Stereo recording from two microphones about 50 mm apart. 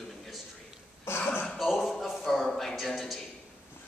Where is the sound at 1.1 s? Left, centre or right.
Left.